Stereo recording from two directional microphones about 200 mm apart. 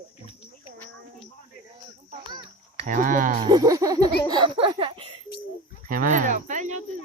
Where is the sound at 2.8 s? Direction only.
40° right (ahead or behind).